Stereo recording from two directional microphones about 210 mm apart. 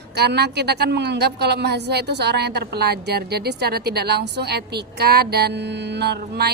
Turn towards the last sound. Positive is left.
turn(degrees=-50)  # may be behind; listen again after turning